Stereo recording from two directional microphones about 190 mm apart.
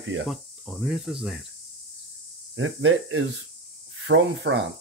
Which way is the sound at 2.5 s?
90° right.